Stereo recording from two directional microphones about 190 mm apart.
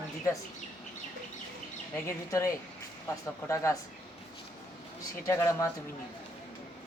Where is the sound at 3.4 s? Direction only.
15° left (ahead or behind).